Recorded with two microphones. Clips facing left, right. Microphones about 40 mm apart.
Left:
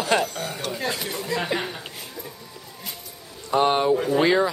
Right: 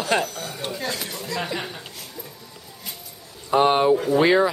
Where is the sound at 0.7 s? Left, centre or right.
Centre.